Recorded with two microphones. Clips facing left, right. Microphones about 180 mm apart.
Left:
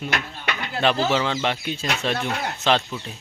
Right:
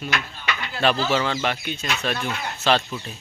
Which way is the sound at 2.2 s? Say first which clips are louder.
Left 2 dB; 65° left (ahead or behind).